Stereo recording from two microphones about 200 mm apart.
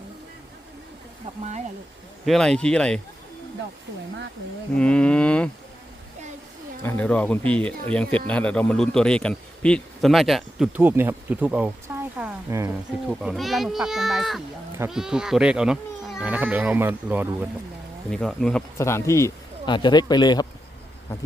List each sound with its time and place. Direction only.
2.2 s a man's voice: centre (ahead or behind)
4.8 s a man's voice: 5° left (ahead or behind)
6.8 s a man's voice: 5° left (ahead or behind)
11.9 s a sound: 10° right (ahead or behind)
12.2 s speech: 15° right (ahead or behind)
13.1 s a man's voice: centre (ahead or behind)
18.1 s a man's voice: centre (ahead or behind)
18.8 s speech: 15° left (ahead or behind)